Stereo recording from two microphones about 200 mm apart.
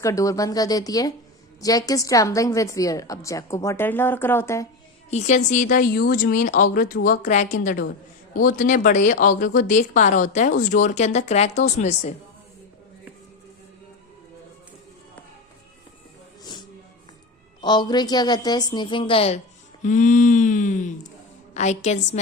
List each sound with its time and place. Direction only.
0.0 s a woman's voice: 15° left (ahead or behind)
5.1 s speech: 35° left (ahead or behind)
16.4 s music: 20° left (ahead or behind)
17.6 s a woman's voice: 20° left (ahead or behind)